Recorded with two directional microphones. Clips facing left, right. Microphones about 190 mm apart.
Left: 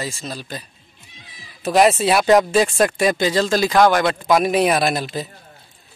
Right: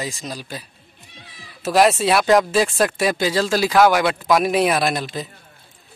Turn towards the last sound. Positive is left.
turn(degrees=5)  # may be behind; listen again after turning